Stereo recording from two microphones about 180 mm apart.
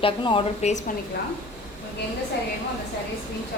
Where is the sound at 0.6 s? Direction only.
40° left (ahead or behind).